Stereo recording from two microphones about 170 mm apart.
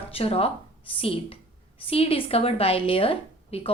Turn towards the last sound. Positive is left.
turn(degrees=35)  # may be behind; listen again after turning